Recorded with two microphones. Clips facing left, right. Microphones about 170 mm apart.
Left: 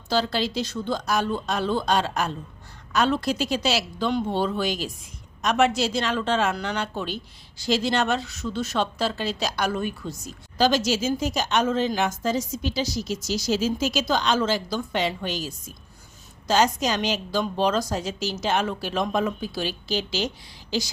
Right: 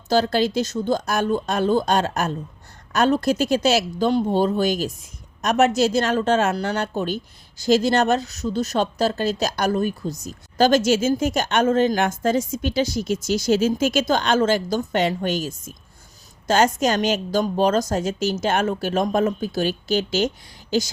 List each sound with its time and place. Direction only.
0.1 s speech: 50° right (ahead or behind)